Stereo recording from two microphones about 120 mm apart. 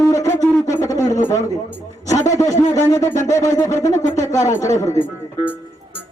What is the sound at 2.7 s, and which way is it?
Speech, 25° left (ahead or behind).